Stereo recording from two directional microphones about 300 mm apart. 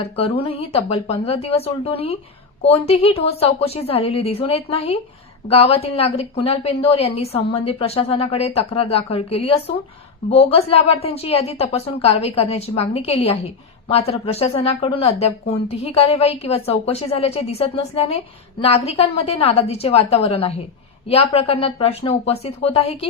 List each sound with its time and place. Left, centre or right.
0.0 s a woman's voice: centre